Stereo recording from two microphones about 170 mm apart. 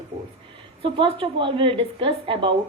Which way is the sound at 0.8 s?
30° right (ahead or behind).